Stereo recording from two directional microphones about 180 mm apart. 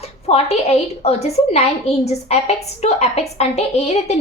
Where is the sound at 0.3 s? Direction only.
35° left (ahead or behind).